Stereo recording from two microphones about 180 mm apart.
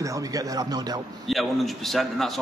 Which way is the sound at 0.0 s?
20° right (ahead or behind).